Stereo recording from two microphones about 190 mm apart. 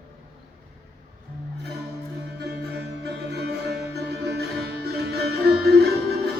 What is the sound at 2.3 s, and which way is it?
Music, 60° right (ahead or behind).